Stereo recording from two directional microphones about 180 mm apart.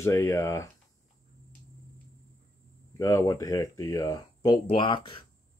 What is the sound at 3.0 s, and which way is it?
Speech, 15° left (ahead or behind).